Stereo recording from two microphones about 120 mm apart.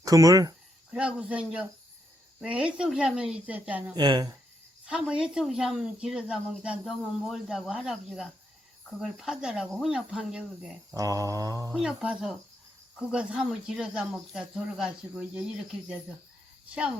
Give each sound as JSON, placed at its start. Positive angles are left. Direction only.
{"t": 0.0, "sound": "mantra", "side_deg": -30}
{"t": 0.9, "sound": "speech", "side_deg": -10}
{"t": 3.9, "sound": "speech", "side_deg": -35}
{"t": 4.9, "sound": "speech", "side_deg": -5}
{"t": 10.9, "sound": "mantra", "side_deg": -30}
{"t": 11.7, "sound": "speech", "side_deg": -5}